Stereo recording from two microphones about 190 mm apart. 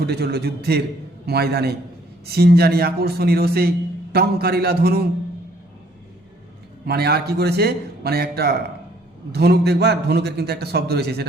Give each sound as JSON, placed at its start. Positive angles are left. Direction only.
{"t": 0.0, "sound": "a man's voice", "side_deg": -60}
{"t": 6.8, "sound": "a man's voice", "side_deg": -55}